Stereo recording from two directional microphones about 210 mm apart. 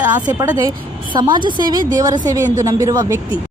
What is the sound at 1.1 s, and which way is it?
Speech, 20° right (ahead or behind).